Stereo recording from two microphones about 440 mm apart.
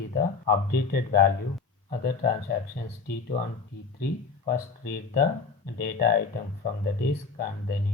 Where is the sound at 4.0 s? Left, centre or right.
Left.